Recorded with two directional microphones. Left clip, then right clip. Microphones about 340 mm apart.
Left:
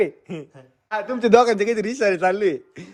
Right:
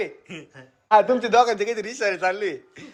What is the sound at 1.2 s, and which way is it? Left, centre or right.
A man's voice, left.